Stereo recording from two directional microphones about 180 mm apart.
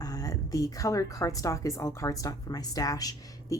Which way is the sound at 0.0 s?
20° left (ahead or behind).